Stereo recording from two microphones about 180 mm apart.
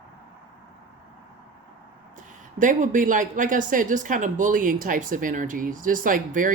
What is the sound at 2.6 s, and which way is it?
Speech, 45° right (ahead or behind).